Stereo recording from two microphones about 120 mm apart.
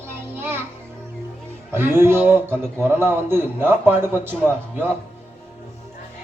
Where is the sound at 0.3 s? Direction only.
20° right (ahead or behind).